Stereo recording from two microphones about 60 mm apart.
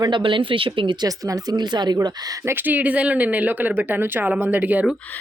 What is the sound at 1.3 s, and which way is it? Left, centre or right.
Speech, right.